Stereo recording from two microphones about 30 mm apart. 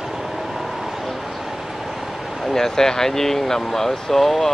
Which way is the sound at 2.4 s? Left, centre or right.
Centre.